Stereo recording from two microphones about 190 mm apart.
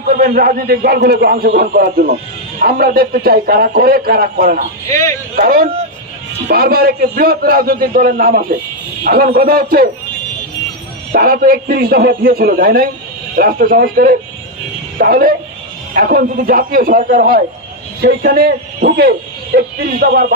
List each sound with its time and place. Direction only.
0.0 s a man's voice: 50° right (ahead or behind)
4.8 s a man's voice: 15° left (ahead or behind)
5.3 s a man's voice: 50° right (ahead or behind)
11.1 s a man's voice: 50° right (ahead or behind)